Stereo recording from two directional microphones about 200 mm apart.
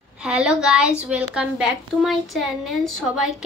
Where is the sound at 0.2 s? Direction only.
5° right (ahead or behind).